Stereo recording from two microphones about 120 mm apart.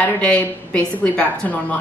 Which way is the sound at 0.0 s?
10° left (ahead or behind).